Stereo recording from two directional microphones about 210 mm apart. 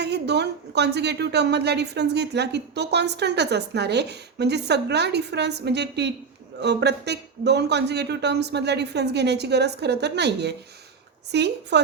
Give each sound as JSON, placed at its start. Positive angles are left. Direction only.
{"t": 0.0, "sound": "a woman's voice", "side_deg": -55}